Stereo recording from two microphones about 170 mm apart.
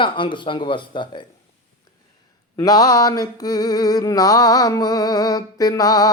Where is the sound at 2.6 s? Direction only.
20° left (ahead or behind).